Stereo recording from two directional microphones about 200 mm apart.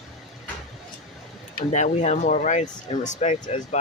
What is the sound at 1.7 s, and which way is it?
Speech, 35° left (ahead or behind).